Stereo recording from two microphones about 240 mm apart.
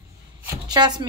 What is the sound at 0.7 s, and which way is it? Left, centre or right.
Speech, centre.